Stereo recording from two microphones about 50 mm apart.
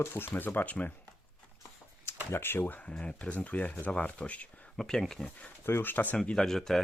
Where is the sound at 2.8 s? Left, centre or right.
Left.